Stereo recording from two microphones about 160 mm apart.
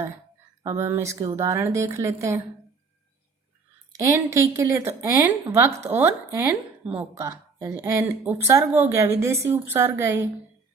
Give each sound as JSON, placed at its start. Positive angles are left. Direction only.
{"t": 0.6, "sound": "a woman's voice", "side_deg": -20}
{"t": 4.0, "sound": "a woman's voice", "side_deg": -15}